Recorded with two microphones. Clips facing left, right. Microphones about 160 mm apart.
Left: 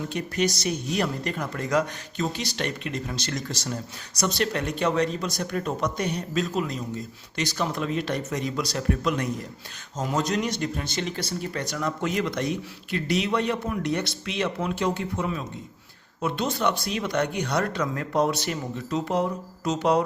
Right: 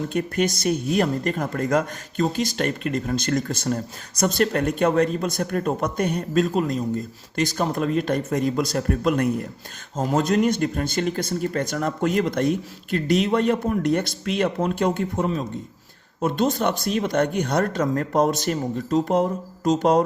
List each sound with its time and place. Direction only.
0.1 s speech: 50° right (ahead or behind)